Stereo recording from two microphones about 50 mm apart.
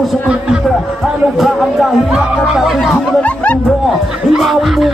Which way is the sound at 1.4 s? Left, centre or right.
Centre.